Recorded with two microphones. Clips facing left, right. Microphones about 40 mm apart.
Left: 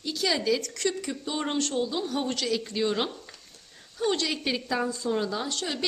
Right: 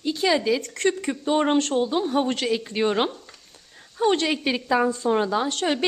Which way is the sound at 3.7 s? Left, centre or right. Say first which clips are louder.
Right 6 dB; right.